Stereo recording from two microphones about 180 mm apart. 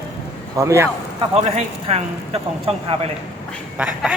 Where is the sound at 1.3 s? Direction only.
35° right (ahead or behind).